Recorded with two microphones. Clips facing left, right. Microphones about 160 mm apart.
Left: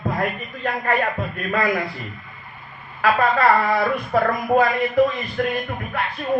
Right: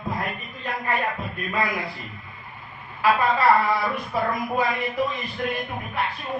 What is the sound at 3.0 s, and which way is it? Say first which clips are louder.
Speech: left 2 dB; 55° left (ahead or behind).